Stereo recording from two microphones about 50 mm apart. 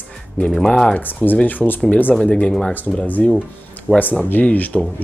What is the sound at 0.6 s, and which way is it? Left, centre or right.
Speech, centre.